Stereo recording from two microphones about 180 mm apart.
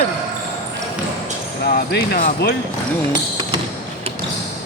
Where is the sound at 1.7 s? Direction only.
55° left (ahead or behind).